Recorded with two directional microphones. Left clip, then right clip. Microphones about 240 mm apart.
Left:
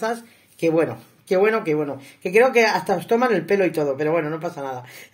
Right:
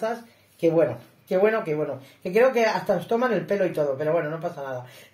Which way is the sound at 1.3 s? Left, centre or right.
Left.